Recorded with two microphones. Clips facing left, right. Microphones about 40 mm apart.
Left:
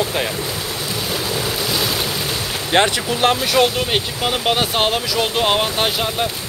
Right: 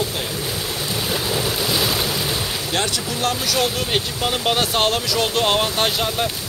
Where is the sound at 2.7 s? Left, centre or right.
Left; by 6.3 s centre.